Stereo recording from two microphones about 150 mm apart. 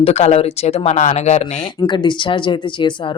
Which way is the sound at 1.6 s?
30° left (ahead or behind).